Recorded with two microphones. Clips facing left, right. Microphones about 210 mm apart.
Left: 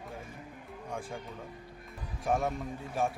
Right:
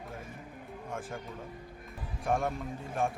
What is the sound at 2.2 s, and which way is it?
Speech, centre (ahead or behind).